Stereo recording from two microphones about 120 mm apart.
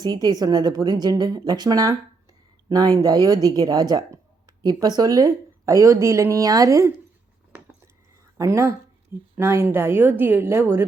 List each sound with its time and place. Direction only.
0.0 s speech: 35° right (ahead or behind)
8.4 s a woman's voice: 25° right (ahead or behind)